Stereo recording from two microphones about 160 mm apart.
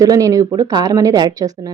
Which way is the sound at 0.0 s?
20° right (ahead or behind).